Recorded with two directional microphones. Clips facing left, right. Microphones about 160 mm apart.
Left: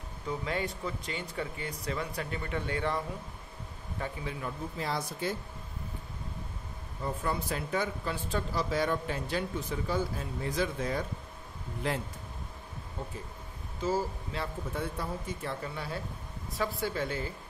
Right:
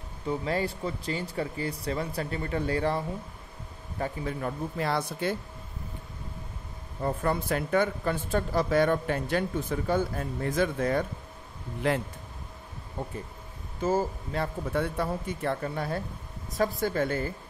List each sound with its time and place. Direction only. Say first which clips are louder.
0.5 s speech: right 4 dB; 35° right (ahead or behind)
4.0 s speech: right 6 dB; 45° right (ahead or behind); by 5.3 s 65° right (ahead or behind)
7.0 s speech: right 5 dB; 50° right (ahead or behind)
13.7 s speech: right 4 dB; 50° right (ahead or behind)
14.7 s speech: right 8 dB; 70° right (ahead or behind); by 17.3 s 50° right (ahead or behind)